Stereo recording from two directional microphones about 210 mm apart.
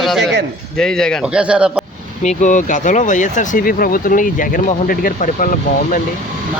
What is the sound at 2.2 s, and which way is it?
Speech, 35° left (ahead or behind).